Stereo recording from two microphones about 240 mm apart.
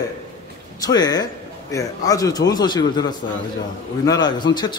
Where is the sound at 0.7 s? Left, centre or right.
Centre.